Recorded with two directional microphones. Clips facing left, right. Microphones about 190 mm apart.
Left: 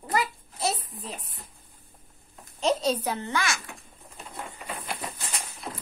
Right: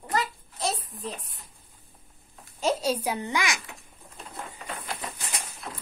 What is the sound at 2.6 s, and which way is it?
A child's voice, 10° right (ahead or behind).